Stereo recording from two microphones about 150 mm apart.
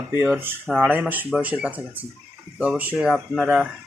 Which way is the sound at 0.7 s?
10° right (ahead or behind).